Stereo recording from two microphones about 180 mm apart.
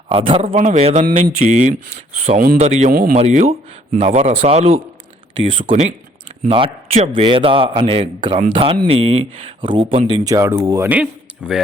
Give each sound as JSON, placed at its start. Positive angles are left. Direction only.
{"t": 0.1, "sound": "a man's voice", "side_deg": -35}
{"t": 2.9, "sound": "speech", "side_deg": -50}
{"t": 3.2, "sound": "a man's voice", "side_deg": -35}